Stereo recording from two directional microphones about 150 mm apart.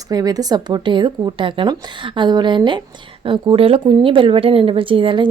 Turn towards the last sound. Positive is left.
turn(degrees=-35)  # may be behind; listen again after turning